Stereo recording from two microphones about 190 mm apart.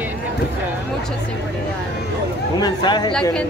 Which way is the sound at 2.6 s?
20° left (ahead or behind).